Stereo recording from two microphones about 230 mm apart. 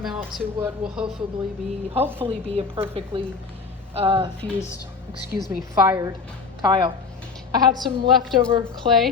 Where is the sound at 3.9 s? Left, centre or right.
Right.